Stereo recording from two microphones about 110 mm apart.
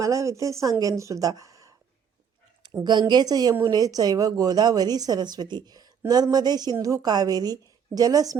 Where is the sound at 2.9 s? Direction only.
40° right (ahead or behind).